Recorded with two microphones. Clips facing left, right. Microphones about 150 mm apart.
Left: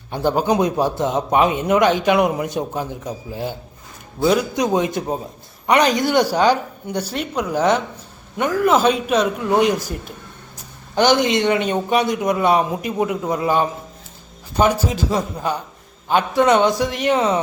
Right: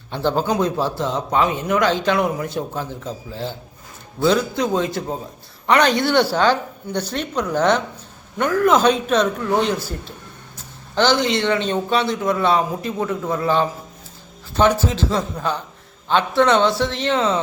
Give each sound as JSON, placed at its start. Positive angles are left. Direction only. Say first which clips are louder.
{"t": 0.1, "sound": "a man's voice", "louder": "left 2 dB", "side_deg": 15}
{"t": 10.9, "sound": "a man's voice", "louder": "left 2 dB", "side_deg": 15}